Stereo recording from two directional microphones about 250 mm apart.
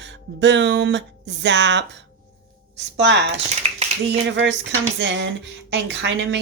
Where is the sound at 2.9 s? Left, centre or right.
Right.